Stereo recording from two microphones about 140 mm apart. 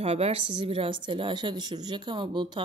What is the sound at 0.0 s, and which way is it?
Speech, 45° right (ahead or behind).